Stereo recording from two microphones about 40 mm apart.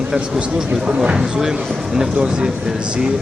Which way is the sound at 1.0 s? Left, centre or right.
Centre.